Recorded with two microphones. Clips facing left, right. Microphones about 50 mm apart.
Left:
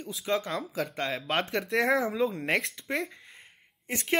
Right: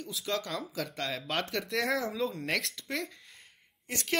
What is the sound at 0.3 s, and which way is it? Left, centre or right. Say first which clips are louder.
Speech: left 5 dB; centre.